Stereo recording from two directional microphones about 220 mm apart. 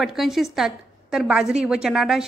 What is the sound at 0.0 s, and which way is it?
A woman's voice, centre (ahead or behind).